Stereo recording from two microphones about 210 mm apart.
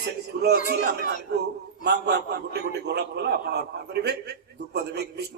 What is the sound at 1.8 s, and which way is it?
A man's voice, 50° right (ahead or behind).